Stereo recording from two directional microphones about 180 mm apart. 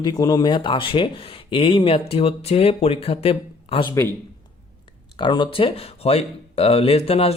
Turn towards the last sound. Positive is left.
turn(degrees=35)  # may be behind; listen again after turning